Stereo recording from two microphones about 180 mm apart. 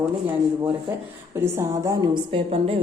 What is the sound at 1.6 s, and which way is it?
Speech, 15° right (ahead or behind).